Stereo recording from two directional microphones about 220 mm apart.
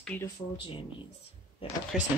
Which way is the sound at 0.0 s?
5° left (ahead or behind).